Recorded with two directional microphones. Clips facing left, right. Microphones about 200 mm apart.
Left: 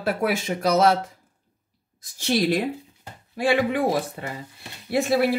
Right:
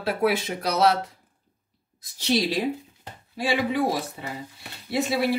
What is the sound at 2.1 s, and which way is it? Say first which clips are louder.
A woman's voice: left 2 dB; 50° left (ahead or behind).